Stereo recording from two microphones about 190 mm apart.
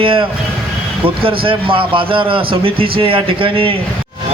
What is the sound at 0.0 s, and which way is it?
A man's voice, 30° right (ahead or behind).